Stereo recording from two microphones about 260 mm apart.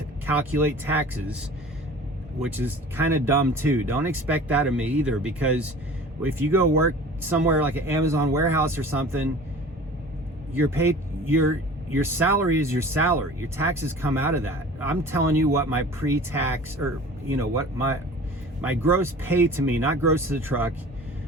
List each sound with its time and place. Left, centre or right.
0.3 s speech: centre
2.4 s speech: centre
7.3 s speech: centre
10.5 s a man's voice: centre